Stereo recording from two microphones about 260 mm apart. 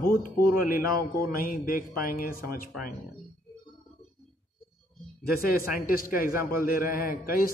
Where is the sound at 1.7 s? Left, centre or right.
Left.